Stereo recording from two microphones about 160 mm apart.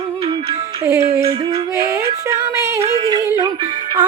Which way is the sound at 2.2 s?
20° right (ahead or behind).